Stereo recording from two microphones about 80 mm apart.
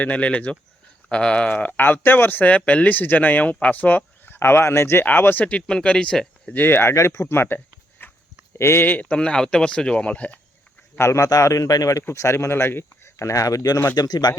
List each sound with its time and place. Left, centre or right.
0.0 s speech: centre
4.4 s speech: left; by 6.5 s centre
6.5 s speech: left
10.9 s a man's voice: left
13.9 s speech: left